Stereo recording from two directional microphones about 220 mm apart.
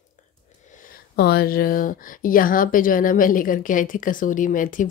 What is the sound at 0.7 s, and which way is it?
Speech, 40° left (ahead or behind).